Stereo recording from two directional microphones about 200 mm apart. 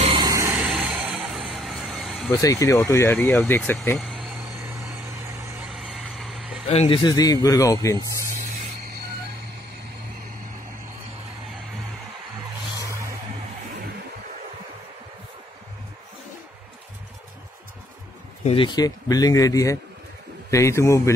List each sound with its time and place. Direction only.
0.0 s a sound: 20° right (ahead or behind)
0.7 s a sound: 5° right (ahead or behind)
1.5 s neigh: centre (ahead or behind)
2.4 s speech: 15° left (ahead or behind)
4.0 s vehicle: centre (ahead or behind)
4.7 s vehicle: 15° right (ahead or behind)
5.7 s vehicle: centre (ahead or behind)
6.7 s a man's voice: 30° left (ahead or behind)
18.4 s a man's voice: 25° left (ahead or behind)